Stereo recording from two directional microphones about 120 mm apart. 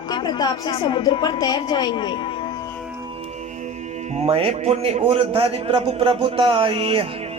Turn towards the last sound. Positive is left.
turn(degrees=-55)  # may be behind; listen again after turning